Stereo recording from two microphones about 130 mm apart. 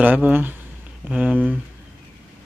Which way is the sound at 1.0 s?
Centre (ahead or behind).